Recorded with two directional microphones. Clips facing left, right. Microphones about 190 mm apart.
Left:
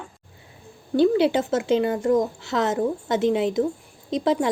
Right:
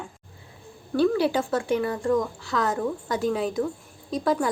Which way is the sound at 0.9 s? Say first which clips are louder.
Left 3 dB; 20° left (ahead or behind).